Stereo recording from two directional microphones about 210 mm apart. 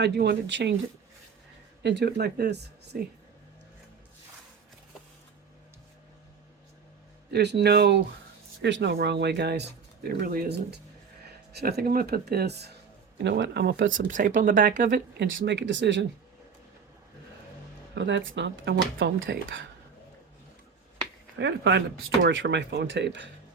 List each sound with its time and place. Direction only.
0.0 s speech: 55° right (ahead or behind)
1.8 s speech: 55° right (ahead or behind)
7.3 s speech: 50° right (ahead or behind)
14.1 s speech: 35° right (ahead or behind)
14.8 s speech: 55° right (ahead or behind)
17.9 s speech: 55° right (ahead or behind)
21.3 s speech: 55° right (ahead or behind)